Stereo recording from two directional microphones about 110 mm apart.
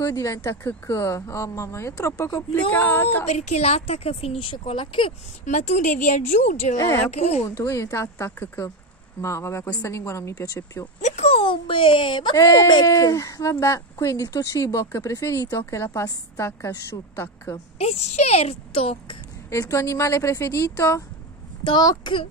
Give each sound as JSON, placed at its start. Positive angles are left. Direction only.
{"t": 0.0, "sound": "speech", "side_deg": 30}
{"t": 3.3, "sound": "a woman's voice", "side_deg": 80}
{"t": 5.4, "sound": "a woman's voice", "side_deg": 90}
{"t": 6.8, "sound": "speech", "side_deg": 20}
{"t": 7.1, "sound": "speech", "side_deg": 80}
{"t": 7.4, "sound": "speech", "side_deg": 30}
{"t": 11.0, "sound": "speech", "side_deg": 85}
{"t": 12.4, "sound": "speech", "side_deg": 35}
{"t": 17.7, "sound": "a woman's voice", "side_deg": 85}
{"t": 19.5, "sound": "speech", "side_deg": 30}
{"t": 21.6, "sound": "speech", "side_deg": 45}